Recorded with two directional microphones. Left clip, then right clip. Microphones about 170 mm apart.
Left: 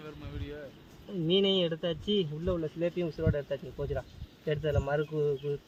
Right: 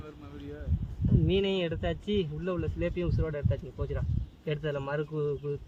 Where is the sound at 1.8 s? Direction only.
45° right (ahead or behind).